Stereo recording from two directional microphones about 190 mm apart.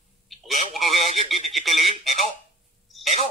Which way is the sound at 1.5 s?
Centre (ahead or behind).